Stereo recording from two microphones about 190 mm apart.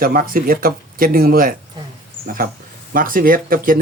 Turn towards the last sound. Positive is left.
turn(degrees=-50)  # may be behind; listen again after turning